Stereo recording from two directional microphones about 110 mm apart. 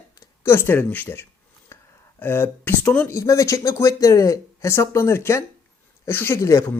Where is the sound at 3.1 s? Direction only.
30° left (ahead or behind).